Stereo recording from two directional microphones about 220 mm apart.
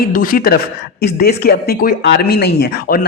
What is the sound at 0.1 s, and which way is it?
Speech, 40° left (ahead or behind).